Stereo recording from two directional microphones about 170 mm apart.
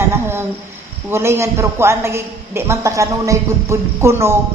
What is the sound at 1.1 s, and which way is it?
A man's voice, 15° right (ahead or behind).